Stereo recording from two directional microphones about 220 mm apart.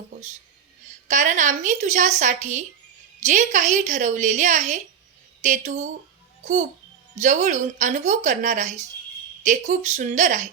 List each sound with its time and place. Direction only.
1.0 s a woman's voice: 35° right (ahead or behind)